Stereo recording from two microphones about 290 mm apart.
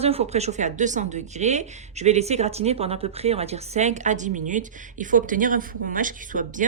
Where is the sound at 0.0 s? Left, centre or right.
Right.